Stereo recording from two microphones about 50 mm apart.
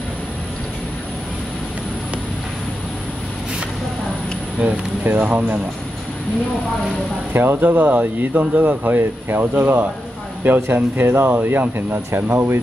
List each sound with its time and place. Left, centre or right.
4.6 s speech: right
7.6 s speech: right